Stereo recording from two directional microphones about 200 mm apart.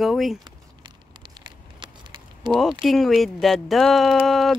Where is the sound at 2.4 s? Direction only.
20° right (ahead or behind).